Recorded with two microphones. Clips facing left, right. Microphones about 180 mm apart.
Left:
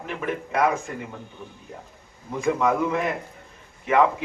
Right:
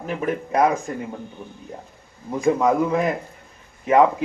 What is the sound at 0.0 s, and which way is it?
Speech, 40° right (ahead or behind).